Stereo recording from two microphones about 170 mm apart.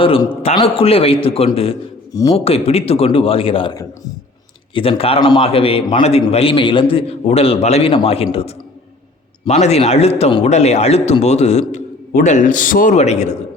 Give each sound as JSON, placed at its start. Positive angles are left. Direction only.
{"t": 0.0, "sound": "a man's voice", "side_deg": 30}